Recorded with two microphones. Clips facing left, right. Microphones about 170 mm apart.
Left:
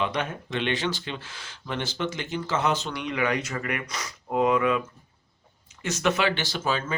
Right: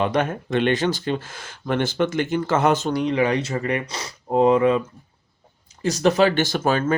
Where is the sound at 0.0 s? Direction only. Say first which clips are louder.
Right 7 dB; 50° right (ahead or behind); by 4.8 s 30° right (ahead or behind).